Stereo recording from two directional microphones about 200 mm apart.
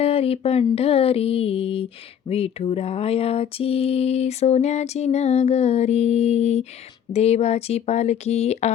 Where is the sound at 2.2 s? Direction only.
30° left (ahead or behind).